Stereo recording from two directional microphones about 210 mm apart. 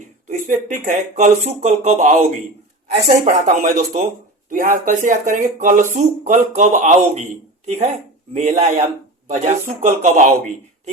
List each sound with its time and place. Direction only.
0.3 s speech: 40° right (ahead or behind)
8.3 s speech: 35° right (ahead or behind)